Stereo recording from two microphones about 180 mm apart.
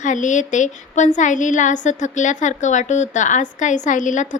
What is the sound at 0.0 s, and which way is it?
A woman's voice, 45° left (ahead or behind).